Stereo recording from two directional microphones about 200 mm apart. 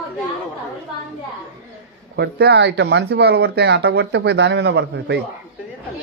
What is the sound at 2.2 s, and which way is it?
Speech, 55° right (ahead or behind).